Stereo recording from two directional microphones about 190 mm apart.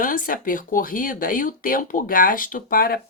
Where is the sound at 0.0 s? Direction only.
45° left (ahead or behind).